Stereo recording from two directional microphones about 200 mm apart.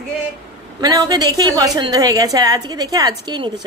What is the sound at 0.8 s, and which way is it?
A woman's voice, 20° right (ahead or behind).